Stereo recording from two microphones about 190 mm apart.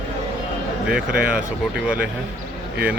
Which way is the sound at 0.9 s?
5° right (ahead or behind).